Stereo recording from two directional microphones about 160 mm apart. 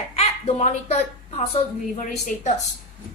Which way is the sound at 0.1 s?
40° left (ahead or behind).